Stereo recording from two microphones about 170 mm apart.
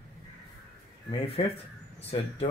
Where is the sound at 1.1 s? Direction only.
35° left (ahead or behind).